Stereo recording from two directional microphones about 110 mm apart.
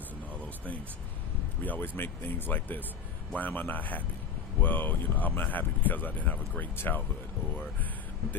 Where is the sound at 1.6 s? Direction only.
15° left (ahead or behind).